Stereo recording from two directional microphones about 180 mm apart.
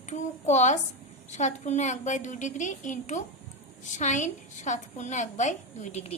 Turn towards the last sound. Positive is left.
turn(degrees=40)  # may be behind; listen again after turning